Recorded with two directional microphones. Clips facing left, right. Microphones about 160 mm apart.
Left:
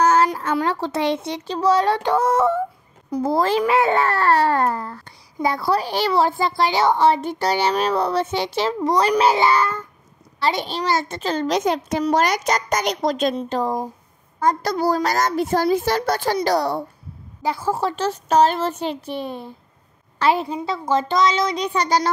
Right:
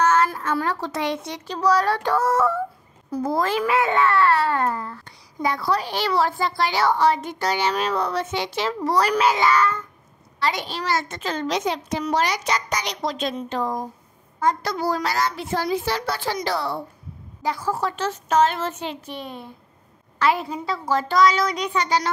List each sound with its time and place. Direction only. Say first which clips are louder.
0.0 s child singing: left 3 dB; 35° left (ahead or behind)
0.6 s a child's voice: left 5 dB; 25° left (ahead or behind)
8.8 s a child's voice: left 2 dB; 20° left (ahead or behind); by 13.3 s 45° left (ahead or behind)
13.4 s a child's voice: left 3 dB; 35° left (ahead or behind)
17.4 s a child's voice: left 3 dB; 25° left (ahead or behind)